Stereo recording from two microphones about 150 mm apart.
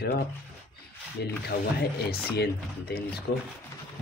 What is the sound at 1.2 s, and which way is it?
Speech, 90° left.